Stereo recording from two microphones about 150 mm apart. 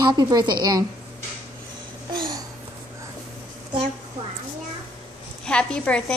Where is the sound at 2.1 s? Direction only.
30° right (ahead or behind).